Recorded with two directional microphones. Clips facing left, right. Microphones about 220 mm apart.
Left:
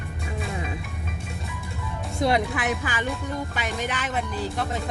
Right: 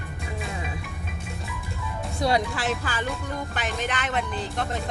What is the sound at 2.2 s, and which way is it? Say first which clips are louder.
Speech: left 1 dB; 20° left (ahead or behind).